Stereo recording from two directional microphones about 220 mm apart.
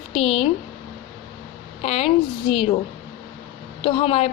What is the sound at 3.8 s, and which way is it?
Speech, 25° left (ahead or behind).